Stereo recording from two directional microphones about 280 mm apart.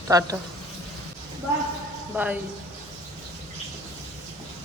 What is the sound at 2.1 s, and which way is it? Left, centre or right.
Speech, centre.